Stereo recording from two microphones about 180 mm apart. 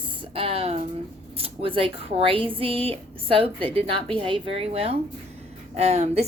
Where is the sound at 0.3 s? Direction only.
30° right (ahead or behind).